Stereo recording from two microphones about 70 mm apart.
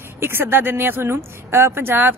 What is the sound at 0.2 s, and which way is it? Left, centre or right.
Speech, right.